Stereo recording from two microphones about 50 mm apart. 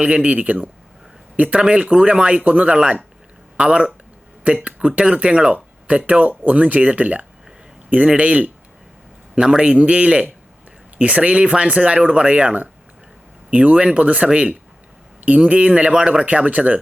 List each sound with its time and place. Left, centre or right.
0.0 s speech: right
9.3 s speech: centre